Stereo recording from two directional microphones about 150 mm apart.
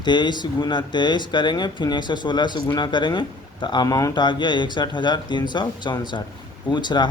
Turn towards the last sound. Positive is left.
turn(degrees=30)  # may be behind; listen again after turning